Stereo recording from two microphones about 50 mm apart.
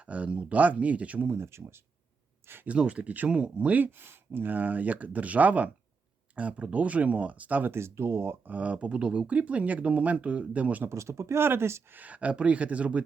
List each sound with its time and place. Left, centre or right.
0.0 s speech: right
1.3 s speech: right
2.6 s speech: right
3.9 s speech: right
7.7 s speech: right
8.4 s speech: right
10.8 s speech: right
11.4 s speech: right
11.9 s speech: right